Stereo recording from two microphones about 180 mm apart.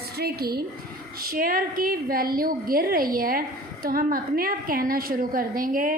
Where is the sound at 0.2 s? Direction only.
60° right (ahead or behind).